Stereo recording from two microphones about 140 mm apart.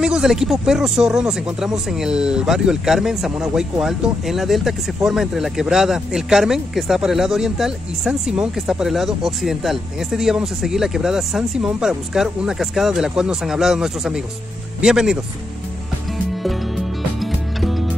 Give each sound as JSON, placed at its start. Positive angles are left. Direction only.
{"t": 0.0, "sound": "speech", "side_deg": -5}
{"t": 17.2, "sound": "music", "side_deg": 0}